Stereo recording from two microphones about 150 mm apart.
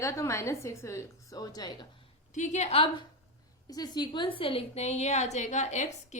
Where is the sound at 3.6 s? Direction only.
25° left (ahead or behind); by 5.9 s 50° left (ahead or behind).